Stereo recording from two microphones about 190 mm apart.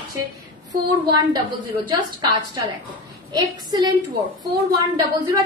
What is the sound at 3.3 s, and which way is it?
Speech, 20° right (ahead or behind).